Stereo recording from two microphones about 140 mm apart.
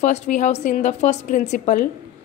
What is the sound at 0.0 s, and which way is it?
A woman's voice, 55° left (ahead or behind).